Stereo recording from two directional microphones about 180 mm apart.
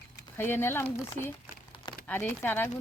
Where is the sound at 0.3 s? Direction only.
10° left (ahead or behind).